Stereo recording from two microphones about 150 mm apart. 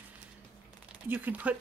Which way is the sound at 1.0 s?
10° right (ahead or behind).